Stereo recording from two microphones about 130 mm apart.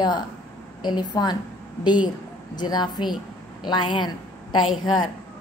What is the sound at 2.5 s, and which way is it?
A woman's voice, 35° left (ahead or behind).